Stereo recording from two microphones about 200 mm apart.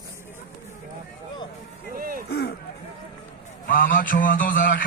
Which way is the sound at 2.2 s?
55° left (ahead or behind).